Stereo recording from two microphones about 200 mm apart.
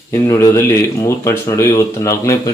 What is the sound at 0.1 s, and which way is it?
Speech, 15° left (ahead or behind).